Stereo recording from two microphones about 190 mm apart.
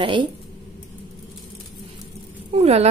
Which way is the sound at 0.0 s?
25° right (ahead or behind).